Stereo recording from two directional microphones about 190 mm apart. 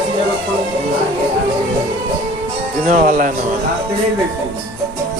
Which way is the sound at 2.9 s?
45° right (ahead or behind).